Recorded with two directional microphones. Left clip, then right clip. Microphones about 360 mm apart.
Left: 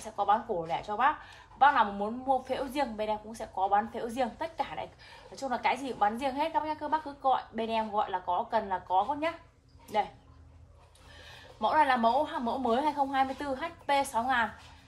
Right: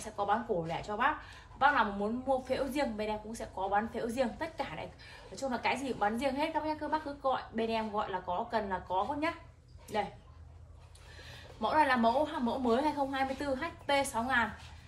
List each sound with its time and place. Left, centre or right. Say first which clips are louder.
0.0 s a woman's voice: left 4 dB; left
11.6 s a woman's voice: left 3 dB; centre